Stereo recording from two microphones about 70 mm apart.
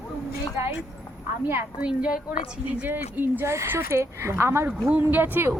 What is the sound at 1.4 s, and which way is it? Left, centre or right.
Speech, right.